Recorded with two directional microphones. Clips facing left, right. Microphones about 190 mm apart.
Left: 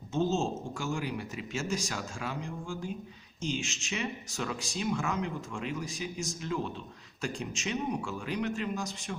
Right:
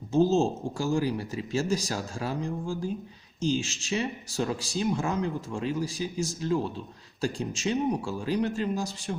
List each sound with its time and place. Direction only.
0.1 s speech: 35° right (ahead or behind)